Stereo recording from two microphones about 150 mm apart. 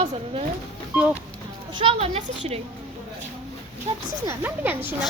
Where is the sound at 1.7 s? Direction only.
40° right (ahead or behind).